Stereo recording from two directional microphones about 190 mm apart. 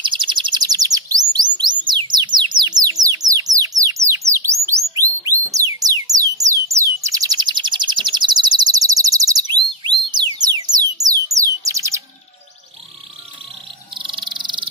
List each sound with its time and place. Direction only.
0.0 s bird: 25° right (ahead or behind)
3.3 s music: 20° right (ahead or behind)
11.1 s bird: 15° right (ahead or behind)
13.9 s a sound: 25° right (ahead or behind)